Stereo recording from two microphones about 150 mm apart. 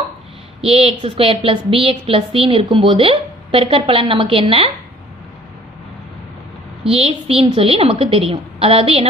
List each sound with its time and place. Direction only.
0.6 s a woman's voice: 40° right (ahead or behind)
6.9 s a woman's voice: 40° right (ahead or behind)